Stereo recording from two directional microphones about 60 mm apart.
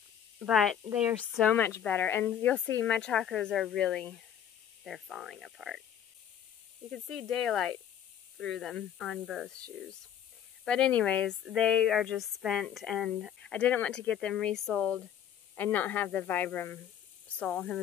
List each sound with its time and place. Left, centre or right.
0.5 s speech: centre
0.9 s speech: right
2.0 s speech: left
2.5 s speech: centre
4.8 s speech: centre
7.1 s speech: centre
9.5 s speech: centre
11.5 s speech: centre
13.5 s speech: left; by 14.9 s centre
15.5 s speech: left
17.5 s speech: centre